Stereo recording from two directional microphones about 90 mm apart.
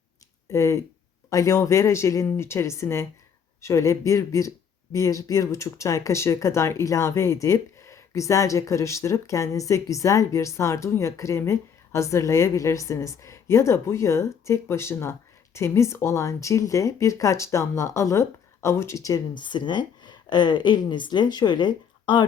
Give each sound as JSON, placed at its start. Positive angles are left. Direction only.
{"t": 0.4, "sound": "speech", "side_deg": 35}
{"t": 19.3, "sound": "speech", "side_deg": 60}